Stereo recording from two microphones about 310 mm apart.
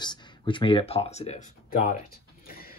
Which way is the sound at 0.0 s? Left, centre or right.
Centre.